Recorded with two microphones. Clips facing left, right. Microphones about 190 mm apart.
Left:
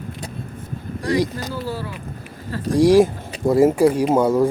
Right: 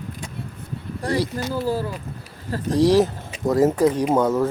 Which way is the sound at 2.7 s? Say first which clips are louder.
Left 3 dB; 10° left (ahead or behind).